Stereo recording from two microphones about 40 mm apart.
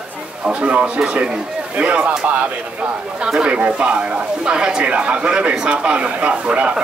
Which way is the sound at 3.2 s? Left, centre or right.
Right.